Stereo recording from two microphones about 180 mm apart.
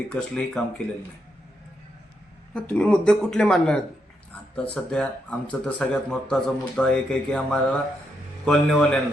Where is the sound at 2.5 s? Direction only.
5° left (ahead or behind).